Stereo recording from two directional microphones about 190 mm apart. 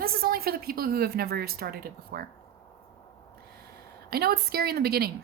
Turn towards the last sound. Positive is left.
turn(degrees=-55)  # may be behind; listen again after turning